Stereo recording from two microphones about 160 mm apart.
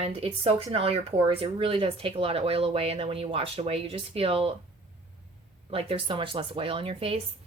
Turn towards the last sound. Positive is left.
turn(degrees=-35)  # may be behind; listen again after turning